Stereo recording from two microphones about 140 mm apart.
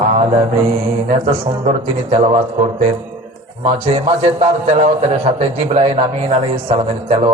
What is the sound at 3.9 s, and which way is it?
A man's voice, 45° right (ahead or behind).